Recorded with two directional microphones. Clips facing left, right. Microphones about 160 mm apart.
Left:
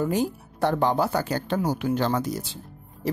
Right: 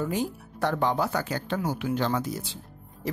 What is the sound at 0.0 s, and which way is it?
Speech, 35° left (ahead or behind).